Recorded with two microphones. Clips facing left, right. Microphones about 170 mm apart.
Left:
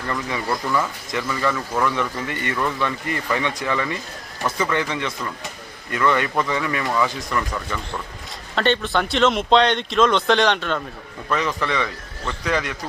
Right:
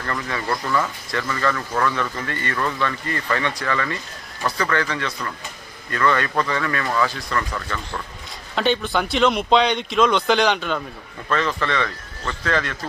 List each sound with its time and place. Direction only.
0.1 s speech: 10° left (ahead or behind)
8.5 s speech: 5° right (ahead or behind)
11.3 s speech: 15° left (ahead or behind)